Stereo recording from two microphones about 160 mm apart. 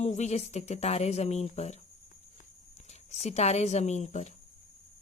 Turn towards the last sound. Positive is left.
turn(degrees=45)  # may be behind; listen again after turning